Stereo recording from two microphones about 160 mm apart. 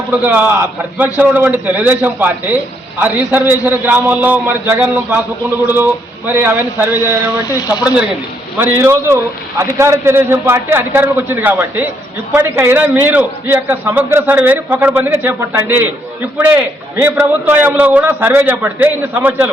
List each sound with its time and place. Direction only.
0.1 s a man's voice: 10° right (ahead or behind)
8.5 s a man's voice: 15° right (ahead or behind)